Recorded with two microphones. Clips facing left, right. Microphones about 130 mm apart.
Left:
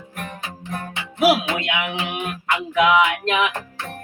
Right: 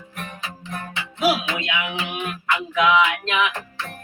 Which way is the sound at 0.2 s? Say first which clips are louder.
Left 2 dB; 50° left (ahead or behind).